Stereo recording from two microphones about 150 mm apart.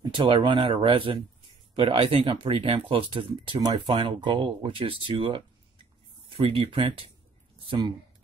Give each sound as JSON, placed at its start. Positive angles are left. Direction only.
{"t": 0.0, "sound": "speech", "side_deg": -30}